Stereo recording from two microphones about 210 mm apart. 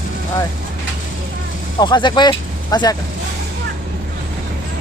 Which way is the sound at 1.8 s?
20° left (ahead or behind).